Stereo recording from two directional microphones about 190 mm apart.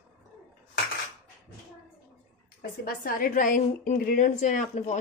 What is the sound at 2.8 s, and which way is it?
A woman's voice, 45° left (ahead or behind).